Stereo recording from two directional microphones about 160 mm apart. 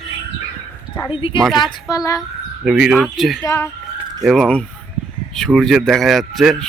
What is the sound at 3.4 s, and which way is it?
Speech, 20° left (ahead or behind).